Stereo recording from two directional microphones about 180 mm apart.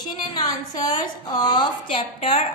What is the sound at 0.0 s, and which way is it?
A woman's voice, 25° left (ahead or behind).